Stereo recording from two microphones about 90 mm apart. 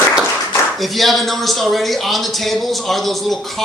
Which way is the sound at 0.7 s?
Centre (ahead or behind).